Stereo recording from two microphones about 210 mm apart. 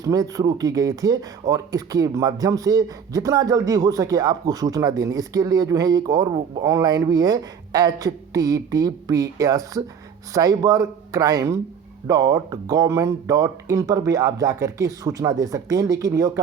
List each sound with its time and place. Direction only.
0.0 s speech: 15° right (ahead or behind)